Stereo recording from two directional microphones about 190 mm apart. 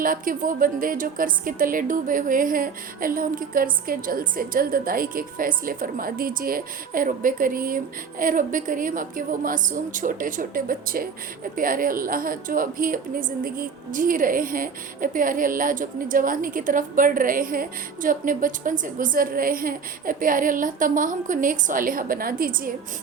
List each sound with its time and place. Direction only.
0.0 s speech: 45° right (ahead or behind)